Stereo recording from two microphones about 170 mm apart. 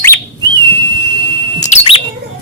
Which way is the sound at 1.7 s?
35° left (ahead or behind).